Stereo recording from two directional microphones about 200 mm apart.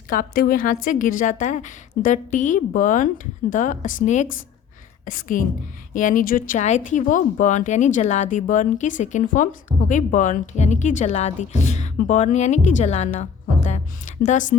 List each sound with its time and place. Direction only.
0.1 s a woman's voice: 45° left (ahead or behind)